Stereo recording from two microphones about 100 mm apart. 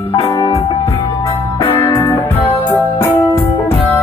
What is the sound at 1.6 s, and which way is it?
Music, 20° left (ahead or behind).